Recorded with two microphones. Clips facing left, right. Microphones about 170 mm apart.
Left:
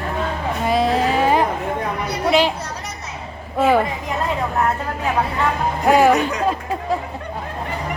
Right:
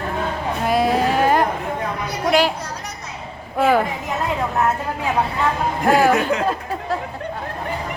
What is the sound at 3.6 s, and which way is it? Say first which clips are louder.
Speech: left 1 dB; 5° left (ahead or behind).